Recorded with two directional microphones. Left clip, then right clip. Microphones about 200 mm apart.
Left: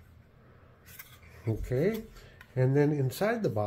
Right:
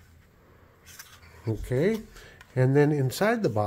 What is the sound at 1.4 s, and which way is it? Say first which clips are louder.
Speech: right 4 dB; 25° right (ahead or behind).